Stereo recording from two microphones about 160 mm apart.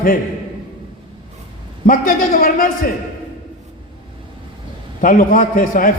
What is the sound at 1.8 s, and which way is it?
Speech, 55° left (ahead or behind).